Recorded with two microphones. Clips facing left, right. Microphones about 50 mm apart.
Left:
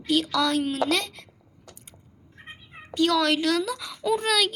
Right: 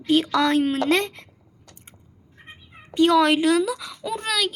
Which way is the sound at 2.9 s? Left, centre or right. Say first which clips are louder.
Right 5 dB; right.